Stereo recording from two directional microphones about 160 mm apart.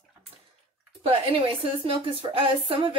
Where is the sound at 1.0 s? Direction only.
35° right (ahead or behind).